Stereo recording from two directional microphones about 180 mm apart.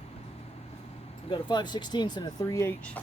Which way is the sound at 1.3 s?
25° left (ahead or behind).